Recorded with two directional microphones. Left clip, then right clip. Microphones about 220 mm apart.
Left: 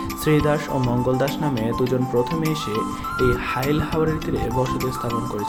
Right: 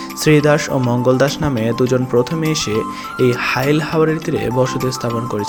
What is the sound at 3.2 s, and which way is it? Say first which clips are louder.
Speech: right 7 dB; 15° right (ahead or behind).